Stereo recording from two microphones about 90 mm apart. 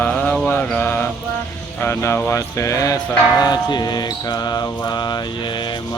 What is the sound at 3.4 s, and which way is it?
Mantra, 50° left (ahead or behind).